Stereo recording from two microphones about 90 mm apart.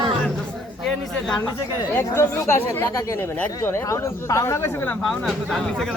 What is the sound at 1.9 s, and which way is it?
Speech, 25° left (ahead or behind).